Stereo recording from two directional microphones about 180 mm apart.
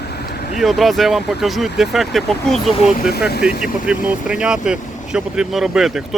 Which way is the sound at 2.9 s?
55° left (ahead or behind).